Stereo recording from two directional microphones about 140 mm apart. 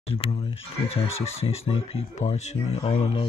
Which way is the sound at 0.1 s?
45° left (ahead or behind).